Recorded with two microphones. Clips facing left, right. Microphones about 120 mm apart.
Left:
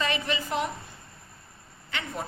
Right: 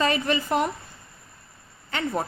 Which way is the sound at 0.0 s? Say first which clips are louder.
Right 6 dB; 45° right (ahead or behind).